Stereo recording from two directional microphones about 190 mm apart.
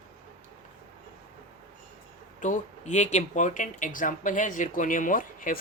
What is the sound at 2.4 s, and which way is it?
Speech, 40° left (ahead or behind).